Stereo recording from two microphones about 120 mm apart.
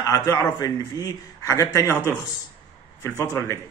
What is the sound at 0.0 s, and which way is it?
A man's voice, 30° left (ahead or behind).